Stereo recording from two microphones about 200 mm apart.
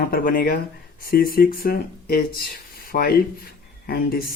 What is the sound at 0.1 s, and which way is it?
Speech, 45° left (ahead or behind).